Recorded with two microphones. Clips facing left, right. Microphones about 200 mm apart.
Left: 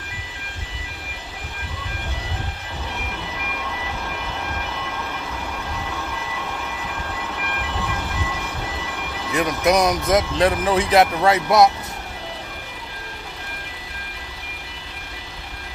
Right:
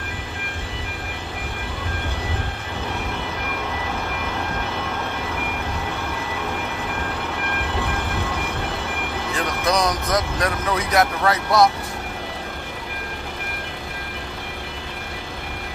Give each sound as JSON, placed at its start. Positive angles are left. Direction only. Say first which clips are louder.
{"t": 9.3, "sound": "speech", "louder": "left 5 dB", "side_deg": 20}